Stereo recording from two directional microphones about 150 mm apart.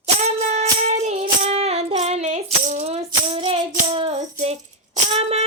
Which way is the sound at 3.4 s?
35° right (ahead or behind).